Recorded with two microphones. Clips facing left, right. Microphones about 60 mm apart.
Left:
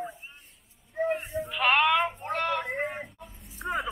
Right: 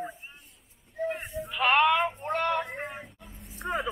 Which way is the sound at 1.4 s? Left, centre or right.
Centre.